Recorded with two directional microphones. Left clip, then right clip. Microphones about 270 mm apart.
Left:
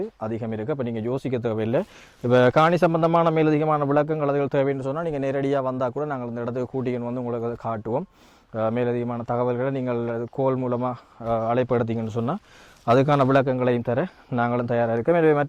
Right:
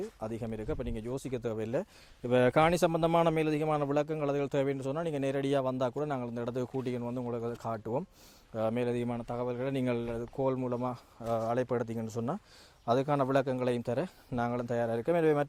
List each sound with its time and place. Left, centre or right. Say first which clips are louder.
0.2 s a man's voice: left 9 dB; left
2.2 s a man's voice: left 8 dB; centre
3.3 s a man's voice: left 9 dB; left
9.2 s speech: left 11 dB; left
9.7 s a man's voice: left 7 dB; centre
10.1 s a man's voice: left 8 dB; left